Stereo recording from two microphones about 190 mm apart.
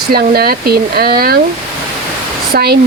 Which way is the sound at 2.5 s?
55° right (ahead or behind).